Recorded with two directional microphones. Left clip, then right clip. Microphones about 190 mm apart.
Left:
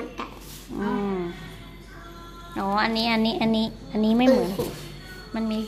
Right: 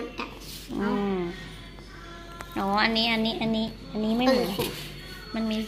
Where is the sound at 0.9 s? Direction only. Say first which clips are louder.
Left 1 dB; 5° right (ahead or behind).